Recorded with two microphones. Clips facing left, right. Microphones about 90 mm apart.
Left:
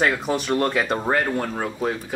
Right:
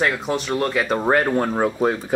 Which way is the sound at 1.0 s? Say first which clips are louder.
Right 4 dB; 20° right (ahead or behind).